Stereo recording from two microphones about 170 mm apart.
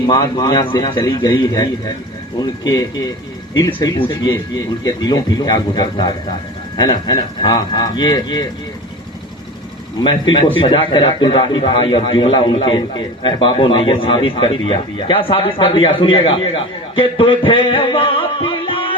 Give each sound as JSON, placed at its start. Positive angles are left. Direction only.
{"t": 0.0, "sound": "a man's voice", "side_deg": 25}
{"t": 10.0, "sound": "a man's voice", "side_deg": 30}